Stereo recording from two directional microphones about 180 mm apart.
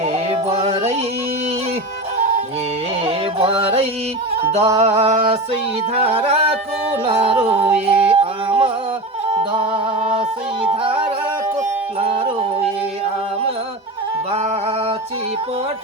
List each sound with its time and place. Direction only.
0.0 s music: 35° right (ahead or behind)
3.0 s music: 30° right (ahead or behind)
4.8 s yodeling: 35° right (ahead or behind)
7.0 s music: 30° right (ahead or behind)